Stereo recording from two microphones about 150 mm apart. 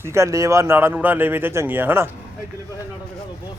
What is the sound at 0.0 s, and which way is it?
A man's voice, 20° right (ahead or behind).